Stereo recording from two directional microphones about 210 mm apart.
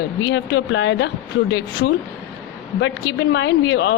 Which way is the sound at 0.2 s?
60° left (ahead or behind).